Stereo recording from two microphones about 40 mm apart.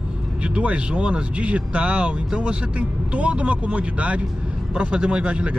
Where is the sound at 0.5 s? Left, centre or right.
Right.